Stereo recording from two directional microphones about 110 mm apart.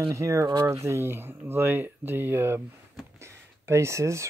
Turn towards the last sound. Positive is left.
turn(degrees=-25)  # may be behind; listen again after turning